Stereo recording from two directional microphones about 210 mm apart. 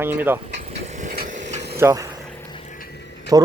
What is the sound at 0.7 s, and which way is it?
Vehicle, 30° right (ahead or behind).